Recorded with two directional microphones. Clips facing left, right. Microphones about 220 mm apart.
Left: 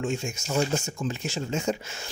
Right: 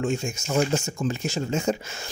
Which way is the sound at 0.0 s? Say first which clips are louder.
Right 3 dB; 45° right (ahead or behind).